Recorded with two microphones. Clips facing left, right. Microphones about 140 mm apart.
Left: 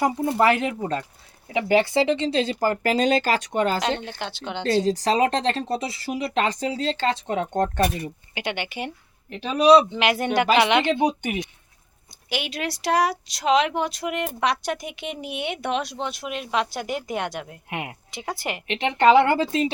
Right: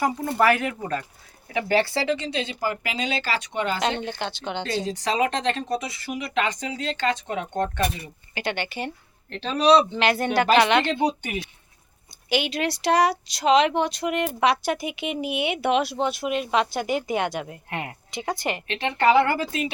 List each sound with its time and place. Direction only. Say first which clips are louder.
0.0 s speech: left 2 dB; 20° left (ahead or behind); by 3.8 s 45° left (ahead or behind)
4.0 s speech: right 2 dB; centre (ahead or behind)
4.6 s speech: left 8 dB; 35° left (ahead or behind)
8.4 s speech: right 1 dB; 15° left (ahead or behind)
12.3 s speech: right 4 dB; centre (ahead or behind)
17.7 s speech: even; 15° left (ahead or behind)
18.1 s speech: right 4 dB; centre (ahead or behind)
18.7 s speech: left 3 dB; 20° left (ahead or behind)